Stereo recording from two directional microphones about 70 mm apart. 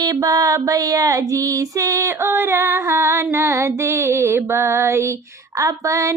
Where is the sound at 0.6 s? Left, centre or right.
Right.